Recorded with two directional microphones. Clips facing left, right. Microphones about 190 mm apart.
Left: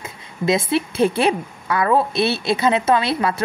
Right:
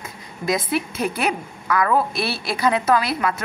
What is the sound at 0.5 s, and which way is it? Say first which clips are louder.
A woman's voice: left 3 dB; 25° left (ahead or behind).